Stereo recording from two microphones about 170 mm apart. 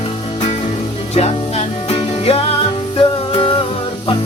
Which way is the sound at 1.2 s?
40° left (ahead or behind).